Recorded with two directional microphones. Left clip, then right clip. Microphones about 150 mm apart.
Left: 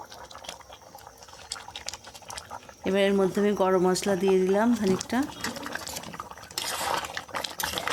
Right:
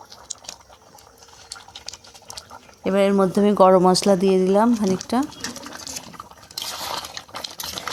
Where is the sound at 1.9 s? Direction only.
25° left (ahead or behind).